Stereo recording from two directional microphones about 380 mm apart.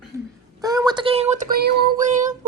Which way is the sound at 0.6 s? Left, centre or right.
Centre.